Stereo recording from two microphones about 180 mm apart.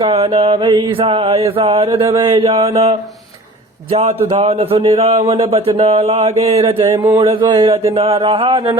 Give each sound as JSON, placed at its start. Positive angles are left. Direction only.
{"t": 0.0, "sound": "speech", "side_deg": -35}
{"t": 1.9, "sound": "speech", "side_deg": -25}
{"t": 3.9, "sound": "speech", "side_deg": -35}